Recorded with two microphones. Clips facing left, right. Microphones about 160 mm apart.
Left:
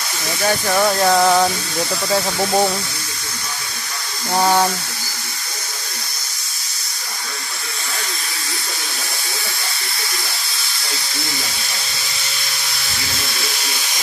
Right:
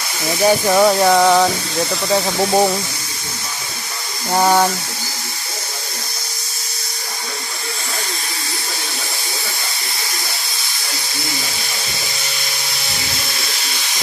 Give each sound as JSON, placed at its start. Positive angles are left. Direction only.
{"t": 0.4, "sound": "speech", "side_deg": -15}
{"t": 1.1, "sound": "a sound", "side_deg": 0}
{"t": 2.1, "sound": "speech", "side_deg": -10}
{"t": 4.4, "sound": "speech", "side_deg": -5}